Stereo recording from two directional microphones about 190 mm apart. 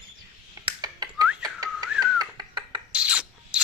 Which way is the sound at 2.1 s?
20° right (ahead or behind).